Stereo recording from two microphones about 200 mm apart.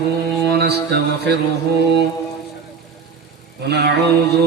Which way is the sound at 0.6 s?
50° right (ahead or behind).